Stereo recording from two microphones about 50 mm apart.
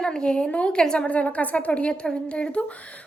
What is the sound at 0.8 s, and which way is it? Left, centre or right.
Speech, centre.